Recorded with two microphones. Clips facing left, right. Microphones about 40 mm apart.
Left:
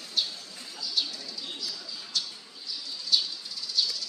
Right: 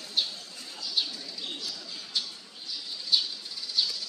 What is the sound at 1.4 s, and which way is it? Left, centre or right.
Bird, right.